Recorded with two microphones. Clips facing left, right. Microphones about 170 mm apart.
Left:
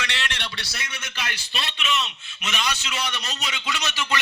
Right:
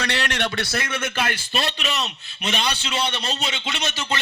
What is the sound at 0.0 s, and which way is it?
A man's voice, 40° right (ahead or behind).